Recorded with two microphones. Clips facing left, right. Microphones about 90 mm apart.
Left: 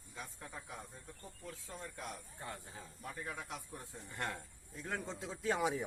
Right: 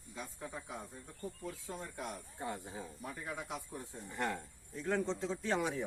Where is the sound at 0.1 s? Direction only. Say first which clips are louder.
Right 3 dB; 5° right (ahead or behind).